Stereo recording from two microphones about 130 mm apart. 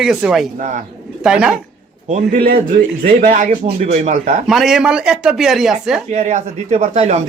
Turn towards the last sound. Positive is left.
turn(degrees=-60)  # may be behind; listen again after turning